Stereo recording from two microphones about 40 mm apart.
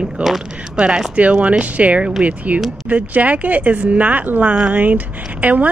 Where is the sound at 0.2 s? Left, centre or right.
Right.